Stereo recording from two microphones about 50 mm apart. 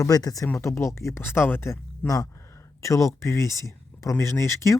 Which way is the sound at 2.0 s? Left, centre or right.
Left.